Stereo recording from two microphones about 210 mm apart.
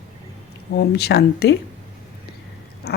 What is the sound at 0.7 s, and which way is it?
Speech, 50° left (ahead or behind).